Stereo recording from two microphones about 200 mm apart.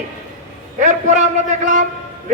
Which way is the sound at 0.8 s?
40° right (ahead or behind).